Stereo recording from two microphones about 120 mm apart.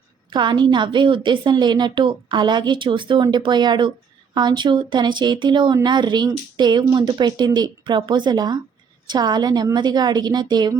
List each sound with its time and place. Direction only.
0.3 s a woman's voice: 40° right (ahead or behind)